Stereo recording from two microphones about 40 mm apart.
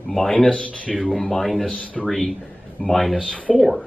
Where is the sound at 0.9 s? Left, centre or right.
Centre.